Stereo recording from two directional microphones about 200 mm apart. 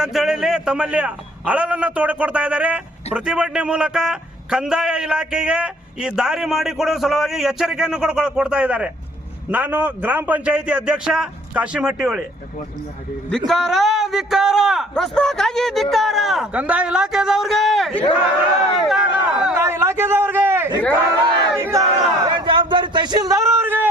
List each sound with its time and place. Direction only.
0.0 s a man's voice: centre (ahead or behind)
13.5 s a man's voice: centre (ahead or behind)
19.5 s a sound: 15° right (ahead or behind)
21.6 s battle cry: 15° right (ahead or behind)